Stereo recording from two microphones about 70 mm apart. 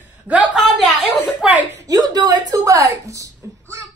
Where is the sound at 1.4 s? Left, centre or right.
Centre.